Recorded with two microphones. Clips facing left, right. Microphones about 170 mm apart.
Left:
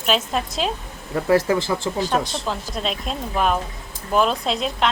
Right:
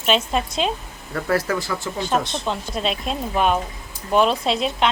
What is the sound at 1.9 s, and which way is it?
A woman's voice, centre (ahead or behind).